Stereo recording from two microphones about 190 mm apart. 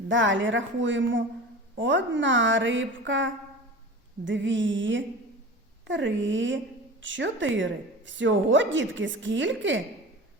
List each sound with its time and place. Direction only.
0.1 s a woman's voice: 80° right